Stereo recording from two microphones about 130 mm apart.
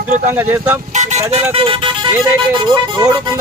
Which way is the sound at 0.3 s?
15° right (ahead or behind).